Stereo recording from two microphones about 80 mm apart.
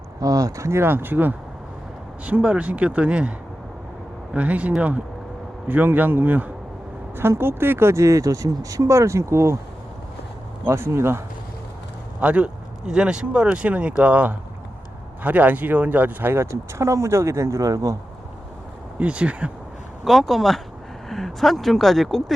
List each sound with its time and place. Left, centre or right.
0.2 s speech: right; by 3.3 s centre
4.4 s a man's voice: centre; by 9.6 s right
10.7 s speech: right
12.2 s speech: centre; by 17.9 s right
18.9 s speech: centre
20.1 s speech: centre